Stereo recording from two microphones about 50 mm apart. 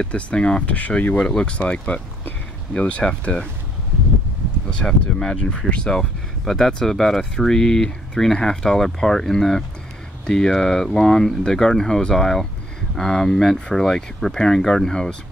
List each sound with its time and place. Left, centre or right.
0.0 s speech: left
1.1 s speech: centre
3.0 s speech: left
4.8 s speech: centre